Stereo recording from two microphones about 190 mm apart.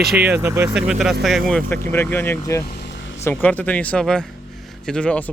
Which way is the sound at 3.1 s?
10° left (ahead or behind).